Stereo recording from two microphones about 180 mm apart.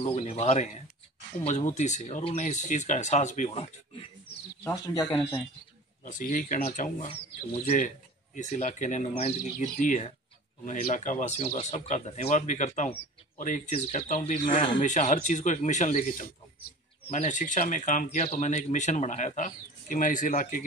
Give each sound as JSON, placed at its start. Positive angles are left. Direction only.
{"t": 0.1, "sound": "speech", "side_deg": 35}
{"t": 4.6, "sound": "speech", "side_deg": 10}
{"t": 6.0, "sound": "speech", "side_deg": 45}